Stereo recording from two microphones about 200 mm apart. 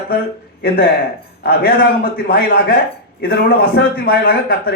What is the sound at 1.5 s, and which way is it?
A man's voice, 50° left (ahead or behind).